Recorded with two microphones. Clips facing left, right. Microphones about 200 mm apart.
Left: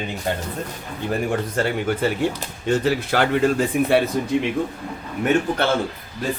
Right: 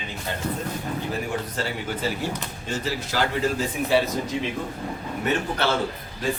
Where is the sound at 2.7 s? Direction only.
60° left (ahead or behind).